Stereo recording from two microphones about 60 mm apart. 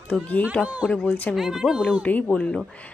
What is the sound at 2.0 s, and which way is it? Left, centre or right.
Speech, left.